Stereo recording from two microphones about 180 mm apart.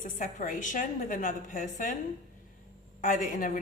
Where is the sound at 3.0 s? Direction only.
45° left (ahead or behind).